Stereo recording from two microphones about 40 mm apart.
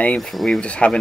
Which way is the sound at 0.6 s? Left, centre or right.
Left.